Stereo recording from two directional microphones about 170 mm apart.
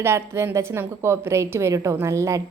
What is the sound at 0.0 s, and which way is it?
A woman's voice, 15° right (ahead or behind).